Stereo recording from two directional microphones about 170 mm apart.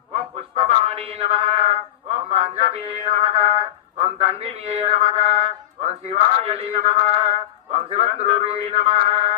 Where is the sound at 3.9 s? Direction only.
35° right (ahead or behind).